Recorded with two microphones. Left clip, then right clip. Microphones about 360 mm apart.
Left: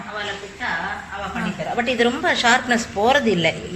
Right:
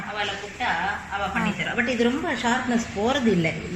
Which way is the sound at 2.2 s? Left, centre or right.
Left.